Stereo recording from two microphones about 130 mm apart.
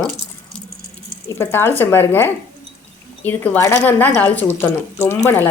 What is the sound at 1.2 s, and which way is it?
Speech, 20° left (ahead or behind).